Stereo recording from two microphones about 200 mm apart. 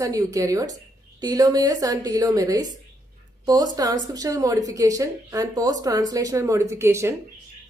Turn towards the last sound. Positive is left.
turn(degrees=-15)  # may be behind; listen again after turning